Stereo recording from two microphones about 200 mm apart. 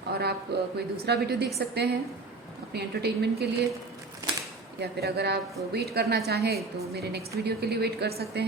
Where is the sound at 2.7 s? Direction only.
55° right (ahead or behind).